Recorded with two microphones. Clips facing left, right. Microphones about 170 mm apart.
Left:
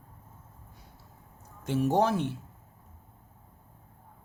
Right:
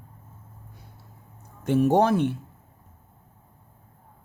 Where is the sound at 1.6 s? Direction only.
60° right (ahead or behind).